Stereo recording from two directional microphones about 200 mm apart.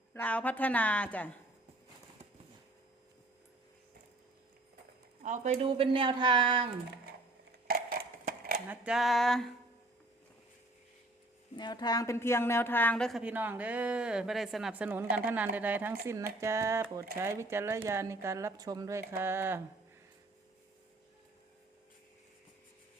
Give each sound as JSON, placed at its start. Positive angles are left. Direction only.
{"t": 0.1, "sound": "a woman's voice", "side_deg": 10}
{"t": 5.2, "sound": "speech", "side_deg": -40}
{"t": 7.7, "sound": "a sound", "side_deg": -50}
{"t": 8.7, "sound": "a woman's voice", "side_deg": -5}
{"t": 11.5, "sound": "a woman's voice", "side_deg": 20}